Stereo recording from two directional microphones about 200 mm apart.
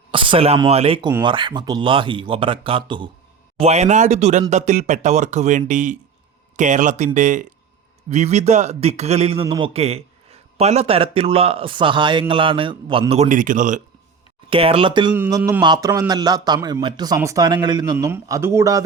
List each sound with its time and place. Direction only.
0.1 s a man's voice: 25° right (ahead or behind)
14.5 s a man's voice: 25° right (ahead or behind)
15.1 s a man's voice: 10° right (ahead or behind)